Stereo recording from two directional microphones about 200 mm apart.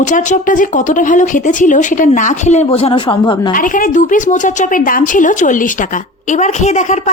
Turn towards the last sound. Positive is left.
turn(degrees=35)  # may be behind; listen again after turning